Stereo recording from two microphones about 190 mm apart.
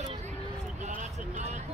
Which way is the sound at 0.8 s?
40° right (ahead or behind).